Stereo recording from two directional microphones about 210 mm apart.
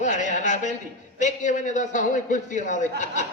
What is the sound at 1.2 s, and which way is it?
A man's voice, 35° left (ahead or behind).